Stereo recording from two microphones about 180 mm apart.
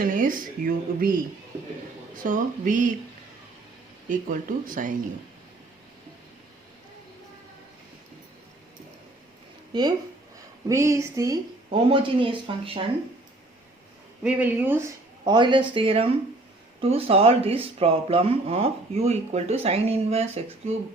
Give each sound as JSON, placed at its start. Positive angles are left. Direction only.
{"t": 0.0, "sound": "speech", "side_deg": -50}
{"t": 2.1, "sound": "speech", "side_deg": -45}
{"t": 4.1, "sound": "speech", "side_deg": -50}
{"t": 9.7, "sound": "speech", "side_deg": -25}
{"t": 11.7, "sound": "speech", "side_deg": -30}
{"t": 14.3, "sound": "speech", "side_deg": -10}
{"t": 15.2, "sound": "speech", "side_deg": -25}